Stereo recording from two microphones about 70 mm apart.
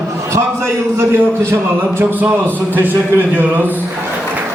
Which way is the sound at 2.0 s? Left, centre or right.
Right.